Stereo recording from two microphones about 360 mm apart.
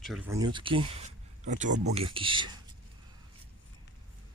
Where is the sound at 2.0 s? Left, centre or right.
Centre.